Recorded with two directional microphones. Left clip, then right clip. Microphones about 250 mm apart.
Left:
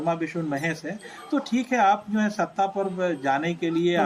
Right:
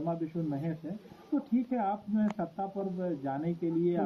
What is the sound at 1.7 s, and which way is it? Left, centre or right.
Speech, centre.